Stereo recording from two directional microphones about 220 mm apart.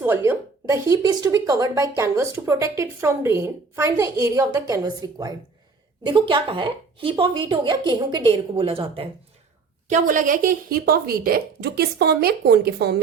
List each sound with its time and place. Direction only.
0.0 s a sound: 10° right (ahead or behind)
0.7 s a woman's voice: 15° right (ahead or behind)
9.9 s a woman's voice: 35° right (ahead or behind)